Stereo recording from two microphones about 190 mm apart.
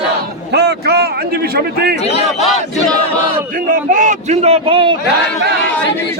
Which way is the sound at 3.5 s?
45° right (ahead or behind).